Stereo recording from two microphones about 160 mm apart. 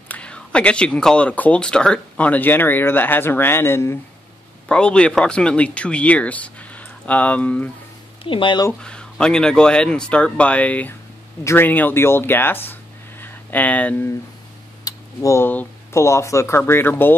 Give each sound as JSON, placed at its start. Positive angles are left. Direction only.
{"t": 0.1, "sound": "speech", "side_deg": 5}
{"t": 8.2, "sound": "speech", "side_deg": 30}
{"t": 8.8, "sound": "speech", "side_deg": 5}